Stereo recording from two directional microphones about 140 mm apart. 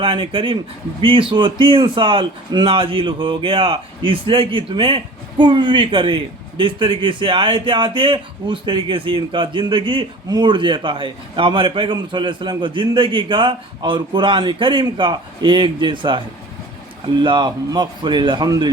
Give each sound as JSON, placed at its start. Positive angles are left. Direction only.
{"t": 0.0, "sound": "a man's voice", "side_deg": -35}
{"t": 17.2, "sound": "a man's voice", "side_deg": -35}